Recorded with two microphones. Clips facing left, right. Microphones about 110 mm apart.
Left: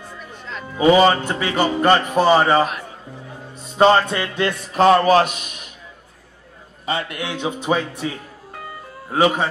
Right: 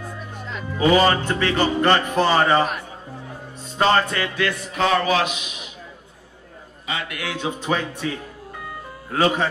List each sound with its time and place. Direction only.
0.7 s music: 20° left (ahead or behind)
3.7 s a man's voice: 20° left (ahead or behind); by 5.7 s 50° left (ahead or behind)
6.9 s a man's voice: 35° left (ahead or behind)
7.2 s music: 20° left (ahead or behind)
9.1 s music: 15° left (ahead or behind)